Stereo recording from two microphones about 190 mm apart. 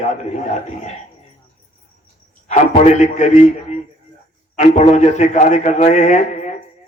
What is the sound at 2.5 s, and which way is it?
Speech, 40° left (ahead or behind).